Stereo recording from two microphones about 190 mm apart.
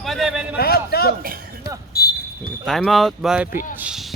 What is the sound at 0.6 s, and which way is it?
Speech, 55° left (ahead or behind).